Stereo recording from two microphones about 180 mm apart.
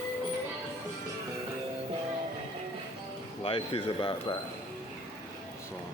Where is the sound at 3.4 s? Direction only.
30° left (ahead or behind).